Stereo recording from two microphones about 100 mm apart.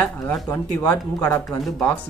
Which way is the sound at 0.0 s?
15° left (ahead or behind).